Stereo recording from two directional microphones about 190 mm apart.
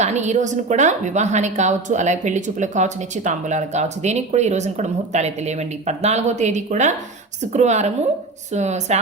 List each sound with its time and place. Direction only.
0.0 s a woman's voice: 35° right (ahead or behind)